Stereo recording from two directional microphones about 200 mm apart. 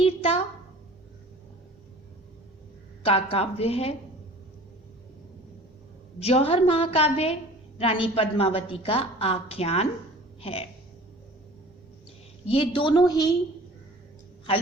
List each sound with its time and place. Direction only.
0.0 s a sound: 30° left (ahead or behind)
3.0 s a woman's voice: 30° left (ahead or behind)
6.1 s a woman's voice: 30° left (ahead or behind)
12.5 s a woman's voice: 25° left (ahead or behind)